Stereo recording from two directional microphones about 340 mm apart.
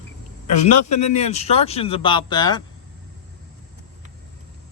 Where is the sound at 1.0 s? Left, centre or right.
Centre.